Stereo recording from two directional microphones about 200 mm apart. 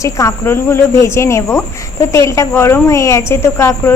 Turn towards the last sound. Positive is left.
turn(degrees=15)  # may be behind; listen again after turning